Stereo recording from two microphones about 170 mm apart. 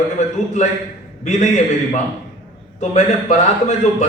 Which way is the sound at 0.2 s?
45° left (ahead or behind).